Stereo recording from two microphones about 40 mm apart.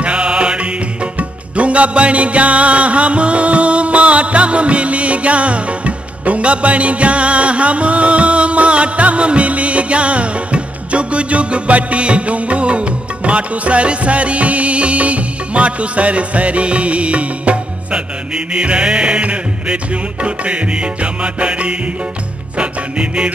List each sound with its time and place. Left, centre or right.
0.0 s music: right